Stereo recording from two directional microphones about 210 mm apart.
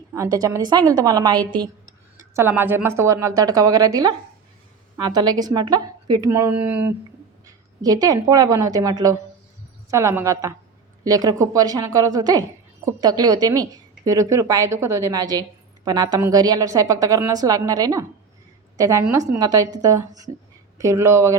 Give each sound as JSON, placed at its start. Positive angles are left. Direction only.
{"t": 0.1, "sound": "speech", "side_deg": -15}
{"t": 2.3, "sound": "a woman's voice", "side_deg": -10}